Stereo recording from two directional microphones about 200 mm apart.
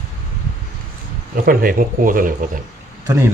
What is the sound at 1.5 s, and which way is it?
Speech, 45° right (ahead or behind).